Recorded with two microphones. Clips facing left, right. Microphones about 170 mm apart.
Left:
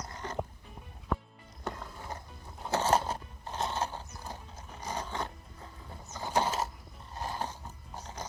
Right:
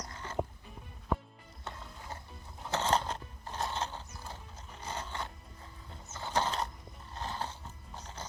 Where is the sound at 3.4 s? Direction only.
20° left (ahead or behind).